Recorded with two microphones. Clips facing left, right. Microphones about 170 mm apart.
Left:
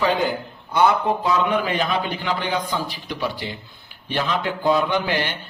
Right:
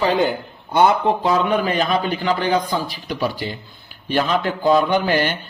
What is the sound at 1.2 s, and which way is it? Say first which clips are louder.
A man's voice: right 2 dB; 40° right (ahead or behind).